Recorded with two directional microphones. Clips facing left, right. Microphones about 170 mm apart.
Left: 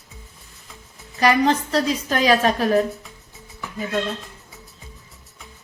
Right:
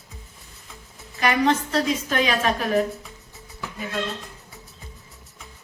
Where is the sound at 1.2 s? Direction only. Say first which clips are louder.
Left 3 dB; 35° left (ahead or behind).